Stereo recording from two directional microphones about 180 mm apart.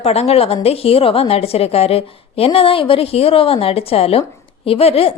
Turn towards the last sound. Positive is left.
turn(degrees=35)  # may be behind; listen again after turning